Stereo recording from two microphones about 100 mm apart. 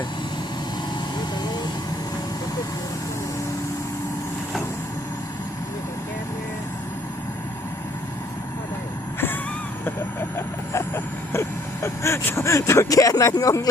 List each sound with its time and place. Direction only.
10.3 s vehicle: 25° left (ahead or behind)